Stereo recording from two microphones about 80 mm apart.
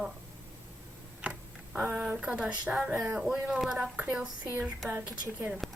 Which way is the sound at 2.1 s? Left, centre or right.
Centre.